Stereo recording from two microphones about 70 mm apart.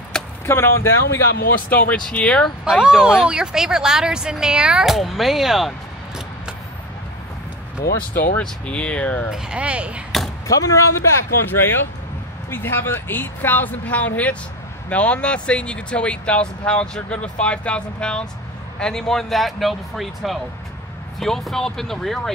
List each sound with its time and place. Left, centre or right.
0.1 s a sound: centre
0.5 s speech: left
2.0 s speech: centre
2.8 s speech: centre
8.1 s speech: centre
9.3 s speech: centre
10.5 s speech: left
11.4 s speech: left; by 22.3 s centre